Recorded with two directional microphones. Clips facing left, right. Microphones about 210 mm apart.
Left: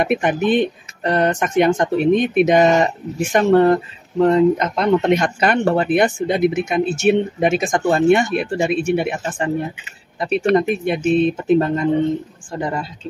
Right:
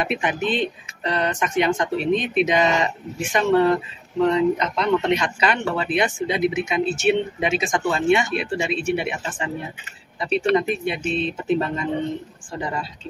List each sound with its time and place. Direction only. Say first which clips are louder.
0.0 s speech: left 6 dB; 50° left (ahead or behind)